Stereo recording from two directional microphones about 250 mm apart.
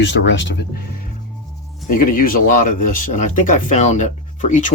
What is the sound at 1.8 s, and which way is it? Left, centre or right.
Speech, left.